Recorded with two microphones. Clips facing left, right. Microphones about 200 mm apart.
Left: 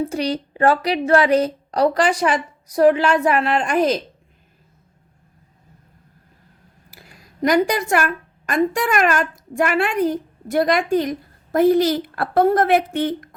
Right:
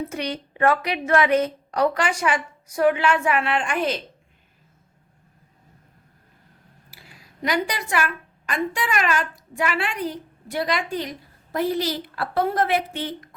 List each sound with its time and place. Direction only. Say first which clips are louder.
0.0 s a woman's voice: left 6 dB; 35° left (ahead or behind)
6.9 s a woman's voice: left 3 dB; 45° left (ahead or behind)